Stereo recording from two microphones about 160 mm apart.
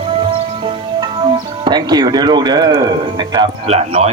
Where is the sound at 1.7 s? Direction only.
25° right (ahead or behind).